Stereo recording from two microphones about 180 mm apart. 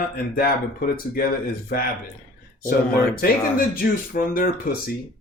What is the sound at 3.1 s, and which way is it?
Speech, 55° left (ahead or behind).